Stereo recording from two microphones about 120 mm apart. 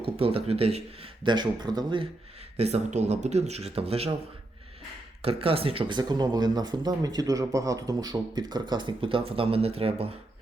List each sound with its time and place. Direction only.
0.0 s speech: 50° right (ahead or behind)
1.2 s speech: 40° right (ahead or behind)
2.6 s speech: 60° right (ahead or behind)
5.2 s speech: 50° right (ahead or behind)